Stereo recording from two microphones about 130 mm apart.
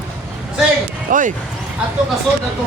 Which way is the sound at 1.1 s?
90° right.